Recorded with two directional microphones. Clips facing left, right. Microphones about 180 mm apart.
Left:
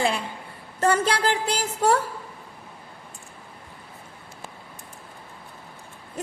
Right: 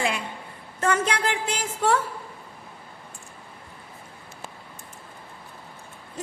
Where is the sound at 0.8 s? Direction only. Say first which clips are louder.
Left 2 dB; 35° left (ahead or behind).